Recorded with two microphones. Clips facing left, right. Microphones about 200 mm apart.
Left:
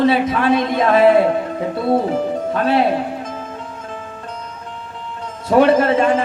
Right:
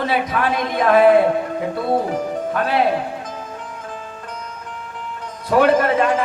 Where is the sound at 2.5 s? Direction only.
25° left (ahead or behind).